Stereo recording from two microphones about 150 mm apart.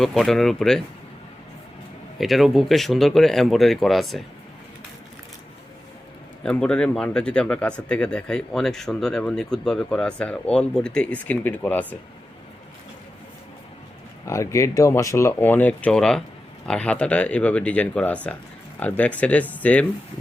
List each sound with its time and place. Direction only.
0.0 s speech: centre (ahead or behind)
2.1 s speech: centre (ahead or behind)
6.4 s speech: 5° left (ahead or behind)
14.3 s speech: 20° left (ahead or behind)